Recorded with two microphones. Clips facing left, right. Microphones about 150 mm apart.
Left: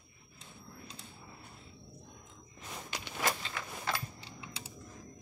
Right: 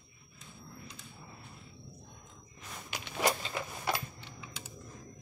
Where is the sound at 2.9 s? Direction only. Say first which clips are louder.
Right 4 dB; 20° right (ahead or behind).